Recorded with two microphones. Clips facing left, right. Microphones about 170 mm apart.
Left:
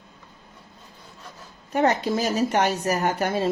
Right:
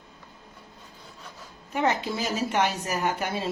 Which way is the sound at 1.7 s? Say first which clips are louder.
Left 5 dB; 40° left (ahead or behind).